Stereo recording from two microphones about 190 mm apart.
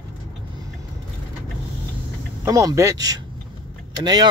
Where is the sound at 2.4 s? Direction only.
15° right (ahead or behind).